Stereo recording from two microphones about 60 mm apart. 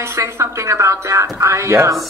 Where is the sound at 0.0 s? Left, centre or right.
Right.